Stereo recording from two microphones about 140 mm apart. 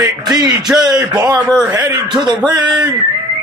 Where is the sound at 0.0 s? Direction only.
30° right (ahead or behind).